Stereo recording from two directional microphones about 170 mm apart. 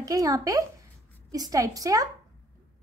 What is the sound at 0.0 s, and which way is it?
A woman's voice, 20° right (ahead or behind).